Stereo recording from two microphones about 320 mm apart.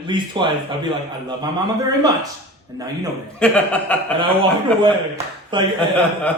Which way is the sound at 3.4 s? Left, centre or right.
Centre.